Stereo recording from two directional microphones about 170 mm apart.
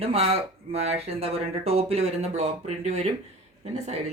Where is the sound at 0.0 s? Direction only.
35° right (ahead or behind).